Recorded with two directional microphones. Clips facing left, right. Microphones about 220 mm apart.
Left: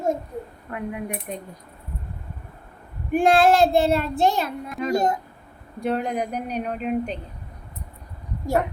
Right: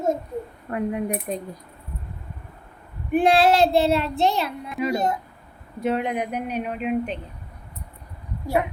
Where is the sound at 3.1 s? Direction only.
45° left (ahead or behind).